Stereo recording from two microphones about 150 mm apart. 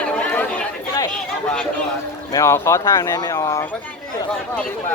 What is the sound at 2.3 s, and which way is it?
Speech, 20° left (ahead or behind).